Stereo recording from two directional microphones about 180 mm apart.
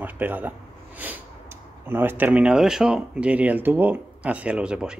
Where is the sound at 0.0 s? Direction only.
10° right (ahead or behind).